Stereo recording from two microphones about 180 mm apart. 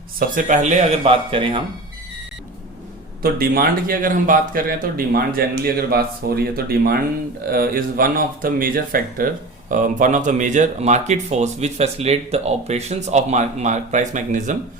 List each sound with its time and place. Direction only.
0.2 s speech: 45° right (ahead or behind)
3.2 s speech: 55° right (ahead or behind)